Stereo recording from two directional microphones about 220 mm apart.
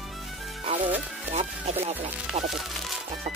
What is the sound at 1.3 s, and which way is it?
Music, 30° right (ahead or behind).